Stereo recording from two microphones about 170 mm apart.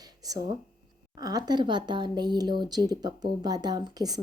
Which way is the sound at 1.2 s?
25° right (ahead or behind).